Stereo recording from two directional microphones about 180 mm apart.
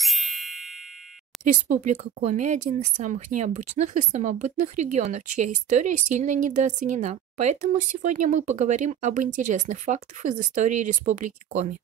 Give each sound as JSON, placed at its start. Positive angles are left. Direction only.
{"t": 0.0, "sound": "music", "side_deg": 0}
{"t": 1.5, "sound": "speech", "side_deg": -45}